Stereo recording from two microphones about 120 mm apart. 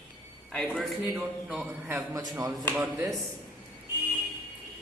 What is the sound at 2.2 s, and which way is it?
Speech, 30° right (ahead or behind).